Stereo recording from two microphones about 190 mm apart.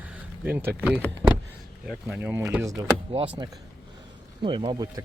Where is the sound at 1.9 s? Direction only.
5° right (ahead or behind).